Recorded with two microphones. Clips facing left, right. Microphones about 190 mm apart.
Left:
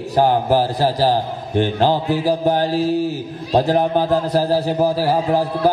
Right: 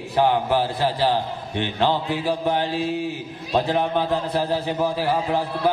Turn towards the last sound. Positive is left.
turn(degrees=40)  # may be behind; listen again after turning